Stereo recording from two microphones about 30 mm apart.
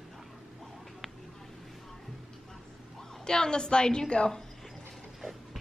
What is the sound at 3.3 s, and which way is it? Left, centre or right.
A woman's voice, left.